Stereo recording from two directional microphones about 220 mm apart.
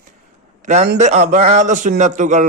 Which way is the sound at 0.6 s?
40° right (ahead or behind).